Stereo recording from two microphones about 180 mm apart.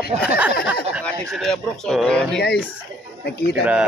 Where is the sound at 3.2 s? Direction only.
60° left (ahead or behind).